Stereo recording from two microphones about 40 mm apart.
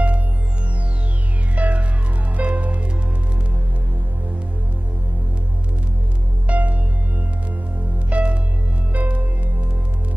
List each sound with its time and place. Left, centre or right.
1.5 s music: right
6.4 s music: right
8.1 s music: right
8.9 s music: right